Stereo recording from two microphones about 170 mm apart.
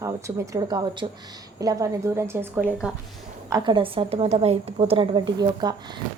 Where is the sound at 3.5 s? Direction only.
30° right (ahead or behind).